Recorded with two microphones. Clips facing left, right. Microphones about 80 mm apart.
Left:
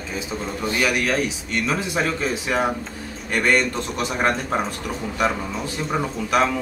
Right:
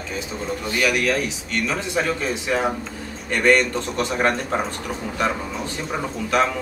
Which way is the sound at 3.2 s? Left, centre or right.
Centre.